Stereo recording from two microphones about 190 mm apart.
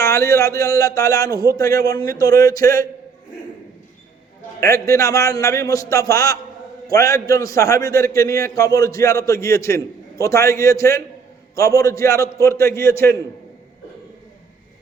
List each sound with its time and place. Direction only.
0.0 s a man's voice: 15° left (ahead or behind)
4.6 s a man's voice: 15° left (ahead or behind)